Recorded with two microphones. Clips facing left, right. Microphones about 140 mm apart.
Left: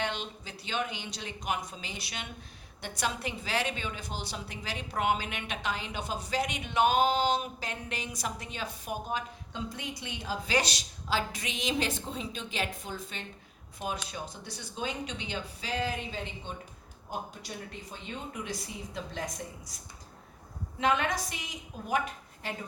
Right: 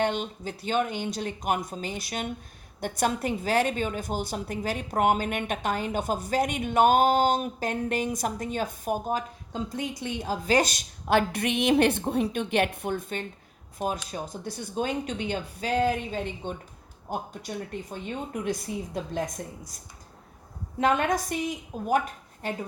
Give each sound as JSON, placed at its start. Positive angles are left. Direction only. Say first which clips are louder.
{"t": 0.0, "sound": "a woman's voice", "louder": "right 8 dB", "side_deg": -50}
{"t": 20.7, "sound": "a woman's voice", "louder": "right 5 dB", "side_deg": -45}